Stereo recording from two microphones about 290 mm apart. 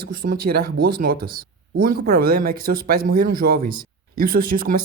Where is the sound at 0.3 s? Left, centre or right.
Right.